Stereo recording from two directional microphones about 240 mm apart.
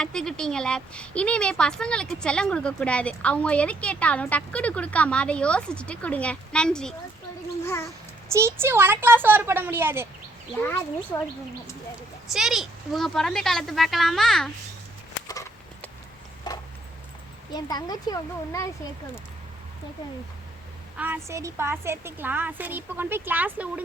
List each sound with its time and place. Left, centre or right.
0.0 s speech: centre
8.3 s a woman's voice: centre
10.6 s speech: centre
12.3 s speech: centre
15.3 s a sound: centre
17.5 s speech: centre
21.0 s a woman's voice: centre